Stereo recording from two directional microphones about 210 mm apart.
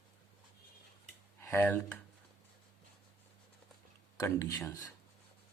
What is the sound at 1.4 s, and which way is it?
Speech, 10° left (ahead or behind).